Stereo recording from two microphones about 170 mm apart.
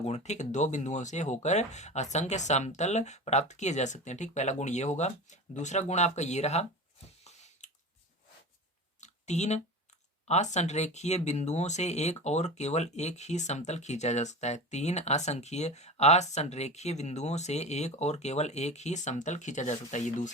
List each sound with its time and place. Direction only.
0.0 s speech: 40° left (ahead or behind)
7.3 s squish: 40° left (ahead or behind)
9.0 s a sound: 45° left (ahead or behind)
10.2 s speech: 40° left (ahead or behind)